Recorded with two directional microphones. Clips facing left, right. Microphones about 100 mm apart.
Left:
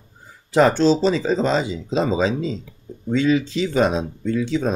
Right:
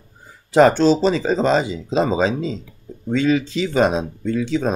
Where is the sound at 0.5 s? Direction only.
55° right (ahead or behind).